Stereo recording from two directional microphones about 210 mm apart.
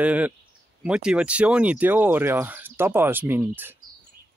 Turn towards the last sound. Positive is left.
turn(degrees=-10)  # may be behind; listen again after turning